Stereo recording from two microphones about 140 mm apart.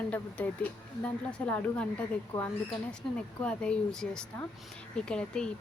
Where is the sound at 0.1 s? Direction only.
10° left (ahead or behind).